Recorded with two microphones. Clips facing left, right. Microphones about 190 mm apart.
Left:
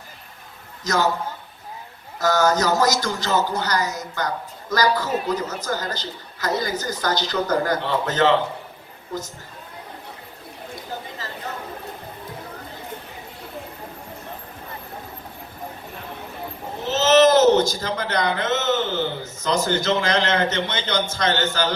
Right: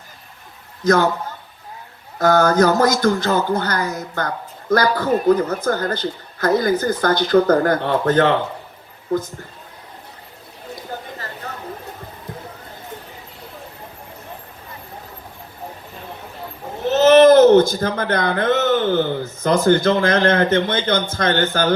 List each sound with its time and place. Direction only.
0.9 s a woman's voice: 55° right (ahead or behind)
2.1 s a woman's voice: 55° right (ahead or behind)
16.8 s speech: 55° right (ahead or behind)